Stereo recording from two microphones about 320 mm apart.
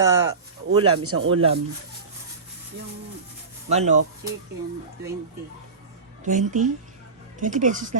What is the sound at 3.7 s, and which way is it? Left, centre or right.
Speech, right.